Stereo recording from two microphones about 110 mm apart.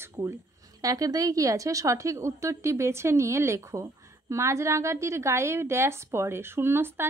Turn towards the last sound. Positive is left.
turn(degrees=-20)  # may be behind; listen again after turning